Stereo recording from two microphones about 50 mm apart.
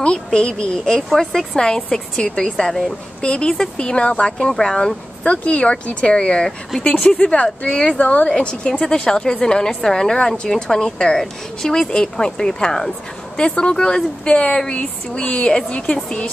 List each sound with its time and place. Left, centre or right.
0.0 s a woman's voice: centre
3.2 s a woman's voice: centre
5.2 s speech: left
8.0 s a woman's voice: left
15.5 s a woman's voice: centre